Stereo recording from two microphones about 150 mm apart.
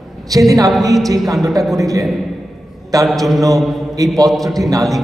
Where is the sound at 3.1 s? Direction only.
Centre (ahead or behind).